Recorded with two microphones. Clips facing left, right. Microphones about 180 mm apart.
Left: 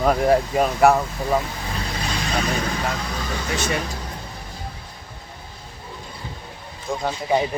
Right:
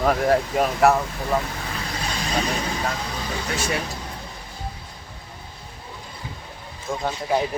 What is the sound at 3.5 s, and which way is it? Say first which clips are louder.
Speech: left 2 dB; 10° right (ahead or behind).